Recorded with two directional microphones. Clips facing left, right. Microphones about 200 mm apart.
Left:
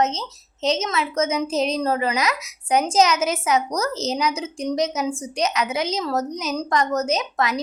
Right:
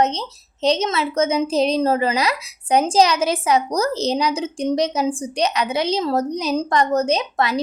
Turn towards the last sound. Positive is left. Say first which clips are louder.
# right 3 dB
turn(degrees=-30)  # may be behind; listen again after turning